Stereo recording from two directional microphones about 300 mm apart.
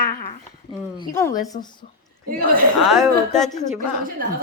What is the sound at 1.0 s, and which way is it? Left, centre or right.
Speech, centre.